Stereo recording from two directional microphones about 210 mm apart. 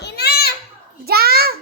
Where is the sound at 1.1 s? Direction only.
45° right (ahead or behind).